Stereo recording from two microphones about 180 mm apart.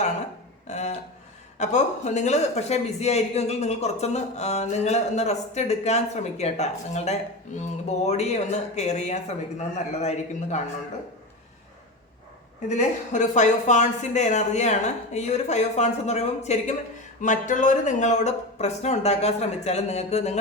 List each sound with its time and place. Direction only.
0.7 s a man's voice: 40° left (ahead or behind)
12.6 s a man's voice: 40° left (ahead or behind)